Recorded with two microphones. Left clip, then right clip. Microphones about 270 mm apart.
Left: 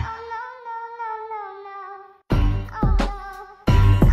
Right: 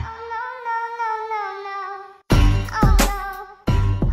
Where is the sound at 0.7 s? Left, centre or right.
Right.